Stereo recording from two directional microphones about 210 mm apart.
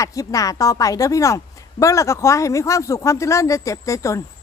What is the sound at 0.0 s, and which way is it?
Speech, 15° left (ahead or behind).